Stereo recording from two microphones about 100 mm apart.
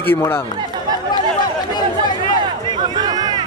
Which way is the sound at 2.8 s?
45° right (ahead or behind).